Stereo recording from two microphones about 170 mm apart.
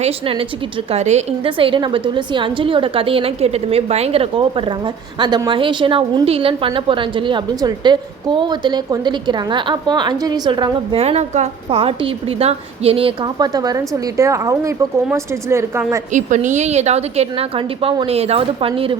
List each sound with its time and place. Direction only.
0.0 s a woman's voice: 35° right (ahead or behind); by 16.0 s 15° right (ahead or behind)
16.1 s a woman's voice: 45° right (ahead or behind)